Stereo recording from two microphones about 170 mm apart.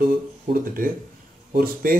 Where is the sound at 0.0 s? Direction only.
60° right (ahead or behind).